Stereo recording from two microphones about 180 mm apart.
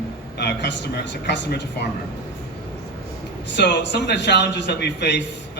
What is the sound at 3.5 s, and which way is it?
A man's voice, 75° left (ahead or behind).